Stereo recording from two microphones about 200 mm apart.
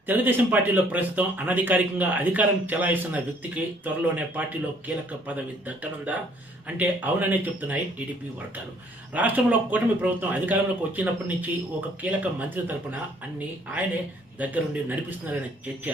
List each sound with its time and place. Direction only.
0.1 s a man's voice: 10° right (ahead or behind)
9.1 s a man's voice: 10° right (ahead or behind)
14.3 s a man's voice: 10° right (ahead or behind)